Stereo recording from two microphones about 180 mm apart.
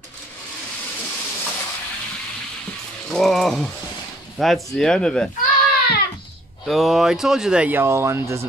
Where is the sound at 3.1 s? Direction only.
Centre (ahead or behind).